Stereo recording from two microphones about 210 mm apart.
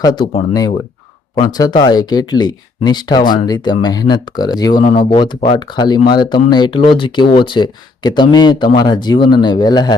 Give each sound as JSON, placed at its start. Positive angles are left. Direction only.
{"t": 0.0, "sound": "speech", "side_deg": 20}
{"t": 1.4, "sound": "speech", "side_deg": 20}
{"t": 4.8, "sound": "speech", "side_deg": 30}